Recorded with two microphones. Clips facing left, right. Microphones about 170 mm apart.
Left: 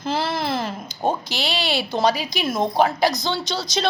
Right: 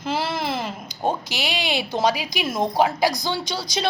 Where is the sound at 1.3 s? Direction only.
15° right (ahead or behind).